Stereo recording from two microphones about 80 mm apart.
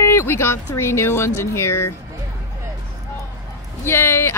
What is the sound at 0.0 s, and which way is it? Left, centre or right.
Speech, left.